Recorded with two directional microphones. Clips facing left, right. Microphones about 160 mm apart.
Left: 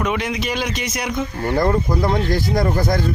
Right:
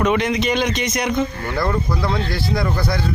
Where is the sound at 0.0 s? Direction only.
5° left (ahead or behind).